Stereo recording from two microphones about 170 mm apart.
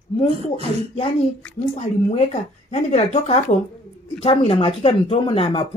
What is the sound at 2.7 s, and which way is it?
Speech, 40° left (ahead or behind).